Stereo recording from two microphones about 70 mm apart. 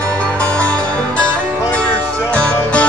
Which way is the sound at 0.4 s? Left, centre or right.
Centre.